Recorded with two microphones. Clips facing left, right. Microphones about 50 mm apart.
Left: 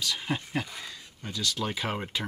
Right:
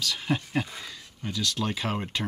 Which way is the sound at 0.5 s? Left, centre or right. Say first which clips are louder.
Right 3 dB; centre.